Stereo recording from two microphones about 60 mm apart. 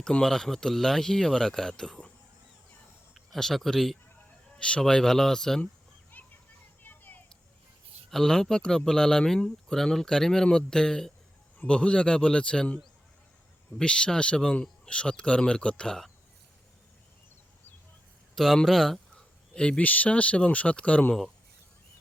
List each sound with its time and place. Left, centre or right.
0.0 s speech: centre
3.2 s speech: centre
4.5 s speech: centre
6.2 s a sound: left
8.1 s speech: centre
18.3 s speech: centre; by 21.0 s left